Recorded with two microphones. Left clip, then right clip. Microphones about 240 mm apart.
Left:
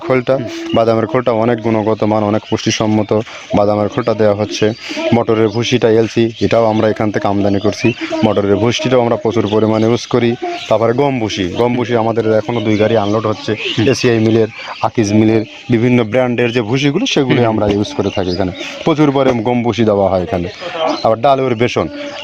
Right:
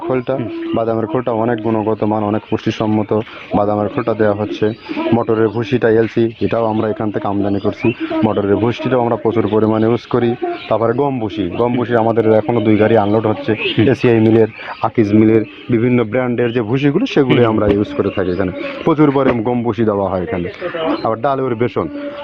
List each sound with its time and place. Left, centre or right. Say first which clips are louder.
0.1 s speech: left 5 dB; left
11.8 s speech: even; left